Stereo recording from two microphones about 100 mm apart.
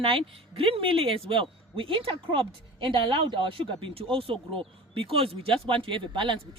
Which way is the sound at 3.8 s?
70° right (ahead or behind).